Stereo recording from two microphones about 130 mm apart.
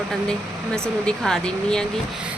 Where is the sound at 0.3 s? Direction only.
5° left (ahead or behind).